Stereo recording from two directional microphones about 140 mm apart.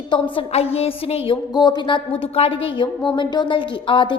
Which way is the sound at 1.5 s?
30° left (ahead or behind).